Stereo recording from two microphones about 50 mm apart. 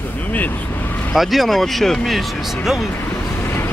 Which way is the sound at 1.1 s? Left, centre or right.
Centre.